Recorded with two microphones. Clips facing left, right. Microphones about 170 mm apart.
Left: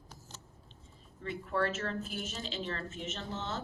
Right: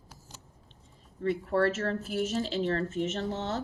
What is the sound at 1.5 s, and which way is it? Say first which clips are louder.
Speech: right 5 dB; 35° right (ahead or behind).